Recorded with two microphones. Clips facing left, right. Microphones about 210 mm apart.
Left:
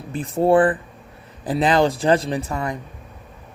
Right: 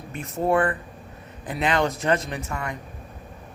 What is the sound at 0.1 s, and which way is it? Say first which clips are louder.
A woman's voice: left 6 dB; 30° left (ahead or behind).